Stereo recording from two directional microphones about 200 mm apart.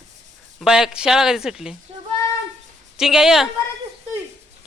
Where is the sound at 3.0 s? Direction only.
Centre (ahead or behind).